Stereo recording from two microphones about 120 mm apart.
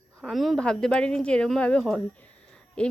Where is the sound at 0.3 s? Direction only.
Centre (ahead or behind).